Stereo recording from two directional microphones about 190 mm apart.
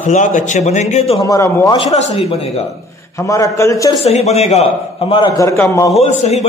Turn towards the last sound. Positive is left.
turn(degrees=35)  # may be behind; listen again after turning